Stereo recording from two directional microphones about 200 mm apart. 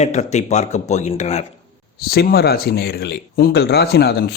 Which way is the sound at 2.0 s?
50° left (ahead or behind).